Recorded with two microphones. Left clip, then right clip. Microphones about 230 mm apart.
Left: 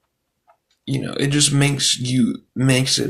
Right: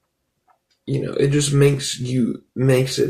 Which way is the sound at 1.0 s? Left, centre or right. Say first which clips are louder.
Even; left.